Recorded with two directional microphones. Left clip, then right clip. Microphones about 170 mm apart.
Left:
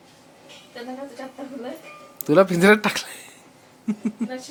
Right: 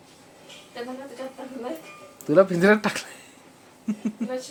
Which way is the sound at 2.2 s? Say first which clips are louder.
Left 2 dB; 20° left (ahead or behind).